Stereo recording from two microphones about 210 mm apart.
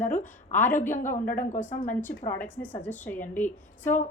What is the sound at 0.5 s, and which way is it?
Speech, 10° left (ahead or behind).